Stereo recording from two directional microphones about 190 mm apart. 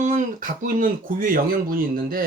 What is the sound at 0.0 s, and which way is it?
Speech, 40° right (ahead or behind).